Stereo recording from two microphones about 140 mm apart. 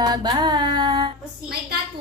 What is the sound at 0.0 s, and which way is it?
Music, 25° right (ahead or behind).